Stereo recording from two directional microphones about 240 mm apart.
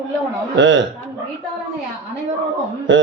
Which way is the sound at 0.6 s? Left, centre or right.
Right.